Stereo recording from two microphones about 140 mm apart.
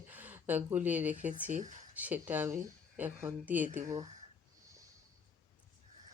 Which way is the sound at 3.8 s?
25° right (ahead or behind).